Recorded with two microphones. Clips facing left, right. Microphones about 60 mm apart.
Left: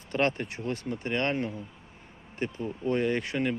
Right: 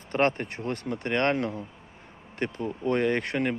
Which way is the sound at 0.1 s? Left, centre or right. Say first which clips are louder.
Right 3 dB; right.